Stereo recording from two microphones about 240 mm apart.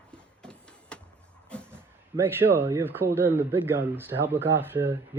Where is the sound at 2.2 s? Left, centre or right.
Centre.